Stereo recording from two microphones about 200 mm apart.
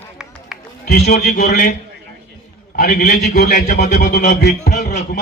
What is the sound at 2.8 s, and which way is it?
A man's voice, 40° left (ahead or behind).